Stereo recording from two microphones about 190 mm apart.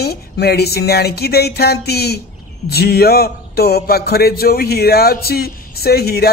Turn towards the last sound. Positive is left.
turn(degrees=55)  # may be behind; listen again after turning